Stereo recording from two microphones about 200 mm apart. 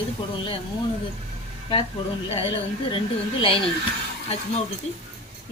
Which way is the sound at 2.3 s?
25° left (ahead or behind).